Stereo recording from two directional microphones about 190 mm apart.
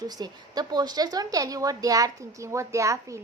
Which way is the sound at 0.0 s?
20° right (ahead or behind).